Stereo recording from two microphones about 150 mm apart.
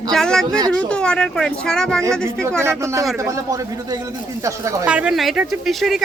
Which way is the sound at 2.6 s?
20° right (ahead or behind).